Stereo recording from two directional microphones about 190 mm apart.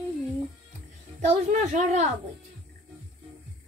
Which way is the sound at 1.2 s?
35° right (ahead or behind).